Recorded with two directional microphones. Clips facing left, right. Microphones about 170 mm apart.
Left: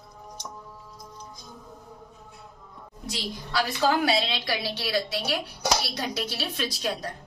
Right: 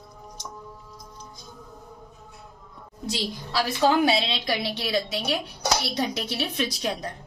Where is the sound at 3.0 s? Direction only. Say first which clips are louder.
Right 4 dB; 25° right (ahead or behind).